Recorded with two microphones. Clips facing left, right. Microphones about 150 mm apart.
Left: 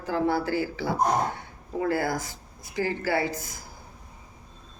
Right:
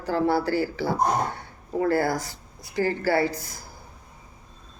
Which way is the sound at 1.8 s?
50° right (ahead or behind).